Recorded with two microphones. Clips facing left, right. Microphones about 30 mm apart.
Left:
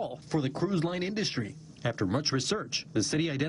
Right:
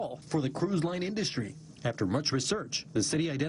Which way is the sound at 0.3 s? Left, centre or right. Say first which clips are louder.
Even; centre.